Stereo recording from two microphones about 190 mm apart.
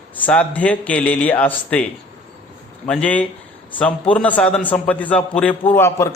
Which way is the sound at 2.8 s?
5° left (ahead or behind).